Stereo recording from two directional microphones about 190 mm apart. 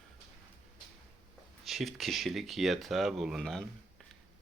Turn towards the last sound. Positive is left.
turn(degrees=0)  # may be behind; listen again after turning